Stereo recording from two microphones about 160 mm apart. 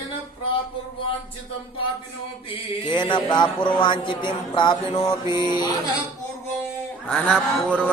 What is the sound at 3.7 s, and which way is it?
Music, 30° left (ahead or behind).